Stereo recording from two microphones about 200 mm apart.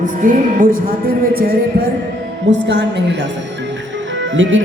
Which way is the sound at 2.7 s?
60° right (ahead or behind).